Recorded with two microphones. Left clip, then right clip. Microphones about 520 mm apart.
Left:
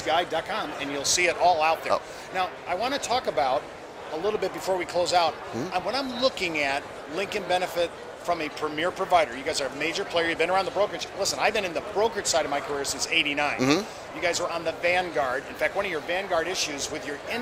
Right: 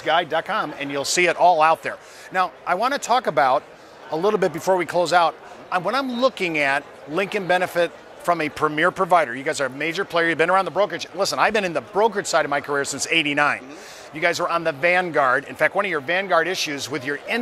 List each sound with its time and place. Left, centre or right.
0.0 s speech: right